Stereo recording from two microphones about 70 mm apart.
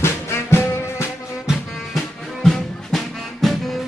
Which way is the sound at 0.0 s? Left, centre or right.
Left.